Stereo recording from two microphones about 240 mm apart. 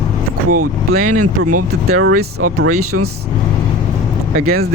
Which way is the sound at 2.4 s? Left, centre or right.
Right.